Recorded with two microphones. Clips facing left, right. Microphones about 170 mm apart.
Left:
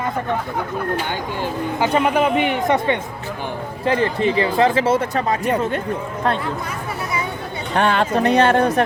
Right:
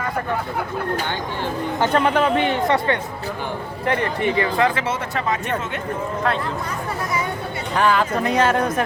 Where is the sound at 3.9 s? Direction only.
30° left (ahead or behind).